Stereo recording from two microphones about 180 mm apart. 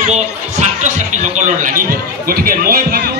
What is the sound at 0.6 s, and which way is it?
Speech, 40° right (ahead or behind).